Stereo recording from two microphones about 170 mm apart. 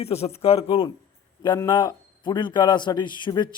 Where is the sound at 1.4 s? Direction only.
25° left (ahead or behind).